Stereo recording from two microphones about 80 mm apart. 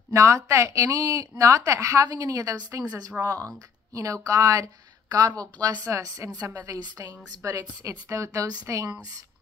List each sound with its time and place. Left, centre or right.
0.1 s speech: right
2.0 s a woman's voice: right
3.2 s speech: right
3.9 s a woman's voice: right
7.4 s a woman's voice: right